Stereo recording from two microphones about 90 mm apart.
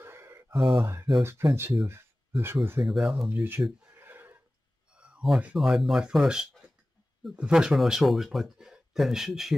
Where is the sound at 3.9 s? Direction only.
20° right (ahead or behind).